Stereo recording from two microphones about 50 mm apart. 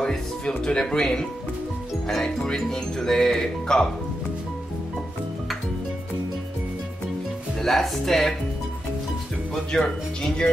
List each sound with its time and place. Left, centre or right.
0.0 s speech: centre
7.6 s speech: centre
9.7 s speech: centre